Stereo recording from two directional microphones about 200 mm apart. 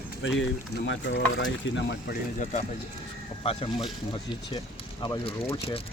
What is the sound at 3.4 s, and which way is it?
Speech, 30° left (ahead or behind).